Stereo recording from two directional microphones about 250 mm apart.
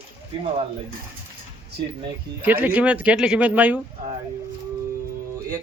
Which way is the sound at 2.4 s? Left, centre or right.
Centre.